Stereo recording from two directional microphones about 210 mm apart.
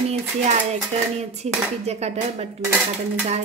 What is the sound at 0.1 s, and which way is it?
Speech, 35° right (ahead or behind).